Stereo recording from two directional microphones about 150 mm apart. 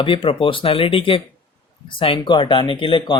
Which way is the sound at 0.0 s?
35° left (ahead or behind).